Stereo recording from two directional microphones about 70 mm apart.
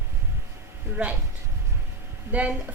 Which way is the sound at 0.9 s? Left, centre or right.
Centre.